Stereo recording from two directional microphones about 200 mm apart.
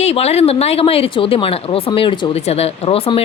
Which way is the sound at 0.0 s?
30° left (ahead or behind).